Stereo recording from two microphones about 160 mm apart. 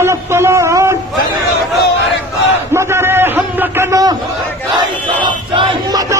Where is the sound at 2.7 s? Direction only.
15° right (ahead or behind).